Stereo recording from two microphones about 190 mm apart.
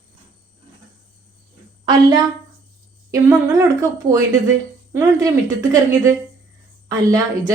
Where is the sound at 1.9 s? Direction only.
20° right (ahead or behind).